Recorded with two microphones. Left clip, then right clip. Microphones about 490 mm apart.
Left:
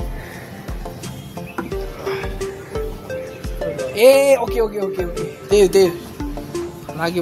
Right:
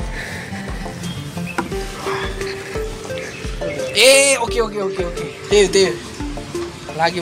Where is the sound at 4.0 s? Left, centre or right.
Left.